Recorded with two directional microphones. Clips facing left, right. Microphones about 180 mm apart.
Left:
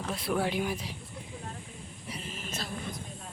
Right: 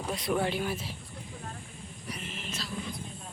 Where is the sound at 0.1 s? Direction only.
5° left (ahead or behind).